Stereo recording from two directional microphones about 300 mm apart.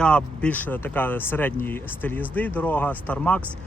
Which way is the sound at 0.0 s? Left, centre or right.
Centre.